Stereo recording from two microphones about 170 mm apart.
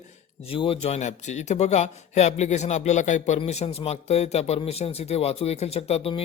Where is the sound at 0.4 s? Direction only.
30° left (ahead or behind).